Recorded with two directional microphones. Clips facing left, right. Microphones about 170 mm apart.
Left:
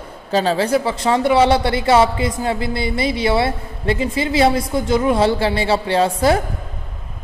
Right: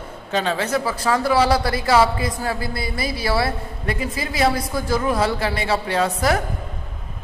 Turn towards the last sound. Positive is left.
turn(degrees=30)  # may be behind; listen again after turning